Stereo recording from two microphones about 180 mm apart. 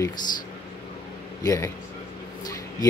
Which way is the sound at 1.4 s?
20° left (ahead or behind).